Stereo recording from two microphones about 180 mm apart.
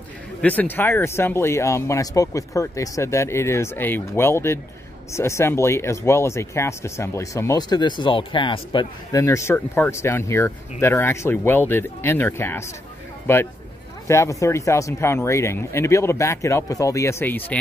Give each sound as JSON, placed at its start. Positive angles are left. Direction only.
{"t": 0.4, "sound": "speech", "side_deg": 10}